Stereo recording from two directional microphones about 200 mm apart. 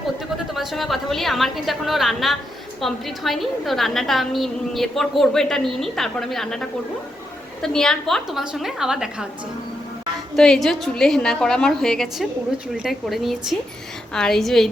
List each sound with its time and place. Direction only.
0.5 s a woman's voice: centre (ahead or behind)
10.3 s a woman's voice: 5° left (ahead or behind)